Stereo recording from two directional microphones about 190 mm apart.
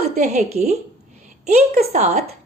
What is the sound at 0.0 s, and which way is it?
Speech, 35° right (ahead or behind).